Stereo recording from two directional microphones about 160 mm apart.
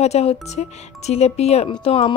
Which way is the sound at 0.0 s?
40° left (ahead or behind).